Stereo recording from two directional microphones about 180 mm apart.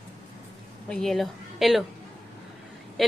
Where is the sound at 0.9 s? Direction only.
Centre (ahead or behind).